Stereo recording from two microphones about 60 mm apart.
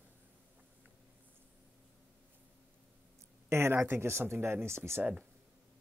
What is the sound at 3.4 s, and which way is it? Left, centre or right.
Speech, right.